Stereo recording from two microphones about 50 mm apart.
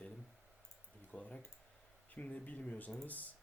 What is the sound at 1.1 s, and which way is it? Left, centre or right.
Speech, left.